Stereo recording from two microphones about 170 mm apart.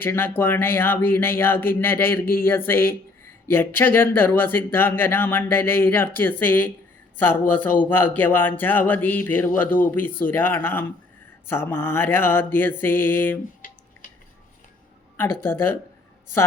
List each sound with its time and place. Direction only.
0.0 s speech: 10° left (ahead or behind)
13.6 s a sound: 55° left (ahead or behind)
15.1 s speech: 10° left (ahead or behind)